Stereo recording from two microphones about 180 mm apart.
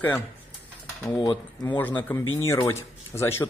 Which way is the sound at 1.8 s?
10° left (ahead or behind).